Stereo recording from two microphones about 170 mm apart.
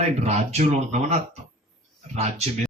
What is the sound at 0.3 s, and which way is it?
Speech, 40° right (ahead or behind).